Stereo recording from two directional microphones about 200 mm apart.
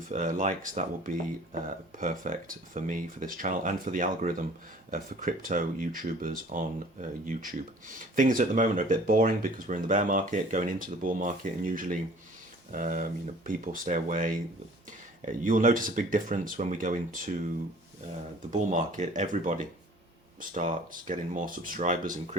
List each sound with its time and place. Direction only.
0.1 s speech: 40° right (ahead or behind)
18.5 s speech: 40° right (ahead or behind)